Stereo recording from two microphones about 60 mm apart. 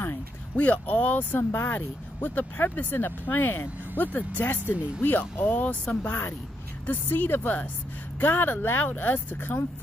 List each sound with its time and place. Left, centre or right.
0.6 s speech: left
1.5 s speech: left